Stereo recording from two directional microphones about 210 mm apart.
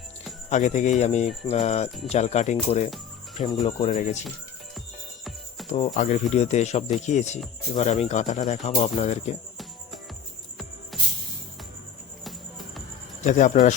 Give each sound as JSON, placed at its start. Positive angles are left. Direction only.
{"t": 0.5, "sound": "speech", "side_deg": 35}
{"t": 5.7, "sound": "speech", "side_deg": 35}
{"t": 10.9, "sound": "music", "side_deg": 0}
{"t": 13.2, "sound": "speech", "side_deg": 35}